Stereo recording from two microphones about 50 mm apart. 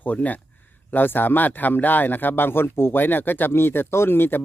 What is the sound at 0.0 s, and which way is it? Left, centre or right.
Speech, left.